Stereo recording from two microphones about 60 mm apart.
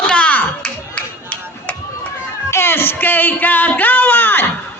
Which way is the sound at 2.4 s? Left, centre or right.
Left.